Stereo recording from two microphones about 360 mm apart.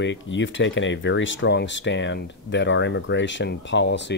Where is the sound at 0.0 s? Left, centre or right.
Left.